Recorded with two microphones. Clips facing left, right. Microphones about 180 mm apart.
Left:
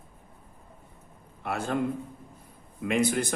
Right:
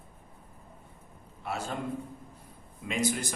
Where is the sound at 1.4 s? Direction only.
60° left (ahead or behind).